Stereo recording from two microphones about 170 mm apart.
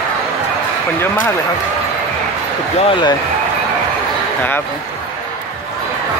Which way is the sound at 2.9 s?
25° left (ahead or behind).